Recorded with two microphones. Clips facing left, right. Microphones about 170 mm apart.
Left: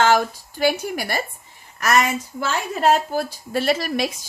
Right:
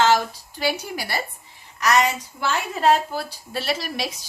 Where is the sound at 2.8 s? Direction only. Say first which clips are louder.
Left 1 dB; 45° left (ahead or behind).